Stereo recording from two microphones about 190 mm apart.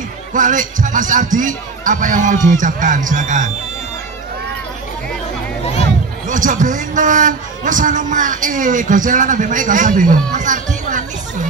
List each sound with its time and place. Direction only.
0.3 s a man's voice: 45° right (ahead or behind)
6.2 s a man's voice: 45° right (ahead or behind)